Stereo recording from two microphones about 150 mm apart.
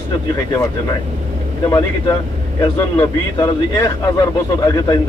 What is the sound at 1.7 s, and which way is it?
A man's voice, 25° left (ahead or behind).